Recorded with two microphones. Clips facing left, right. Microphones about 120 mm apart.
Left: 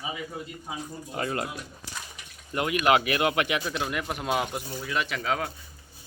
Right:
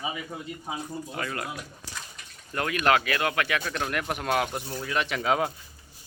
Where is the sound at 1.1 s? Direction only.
30° left (ahead or behind).